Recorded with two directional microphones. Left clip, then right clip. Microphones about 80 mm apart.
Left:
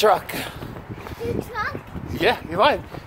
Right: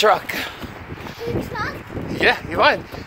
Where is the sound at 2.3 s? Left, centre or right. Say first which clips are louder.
Right 2 dB; left.